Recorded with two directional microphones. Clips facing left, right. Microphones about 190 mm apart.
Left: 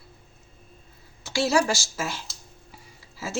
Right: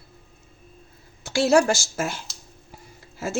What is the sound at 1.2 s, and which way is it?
Speech, 50° right (ahead or behind).